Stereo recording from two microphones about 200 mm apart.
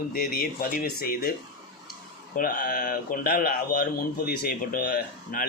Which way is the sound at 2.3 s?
40° left (ahead or behind).